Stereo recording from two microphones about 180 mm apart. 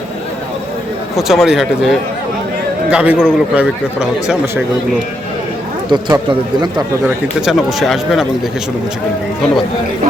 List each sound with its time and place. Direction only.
1.1 s a man's voice: centre (ahead or behind)
5.9 s a man's voice: 25° right (ahead or behind)
7.4 s speech: centre (ahead or behind)